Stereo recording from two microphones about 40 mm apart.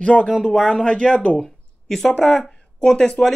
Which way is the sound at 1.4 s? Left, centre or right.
Centre.